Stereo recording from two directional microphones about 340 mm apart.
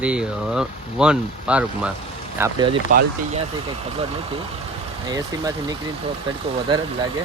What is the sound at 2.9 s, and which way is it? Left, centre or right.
Speech, right.